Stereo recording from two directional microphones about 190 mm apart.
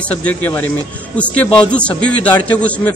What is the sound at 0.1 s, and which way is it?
A man's voice, 10° left (ahead or behind).